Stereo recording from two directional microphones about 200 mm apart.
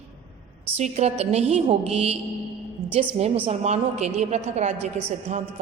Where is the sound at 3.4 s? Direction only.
35° right (ahead or behind).